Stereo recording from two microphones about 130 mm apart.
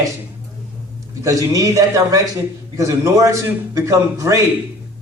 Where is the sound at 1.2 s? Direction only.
25° right (ahead or behind).